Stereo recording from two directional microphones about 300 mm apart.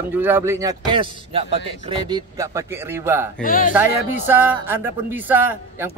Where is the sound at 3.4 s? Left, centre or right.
Left.